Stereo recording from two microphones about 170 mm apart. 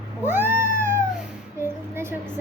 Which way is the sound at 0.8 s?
15° right (ahead or behind).